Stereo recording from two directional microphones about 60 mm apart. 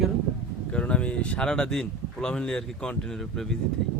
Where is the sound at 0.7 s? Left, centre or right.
Centre.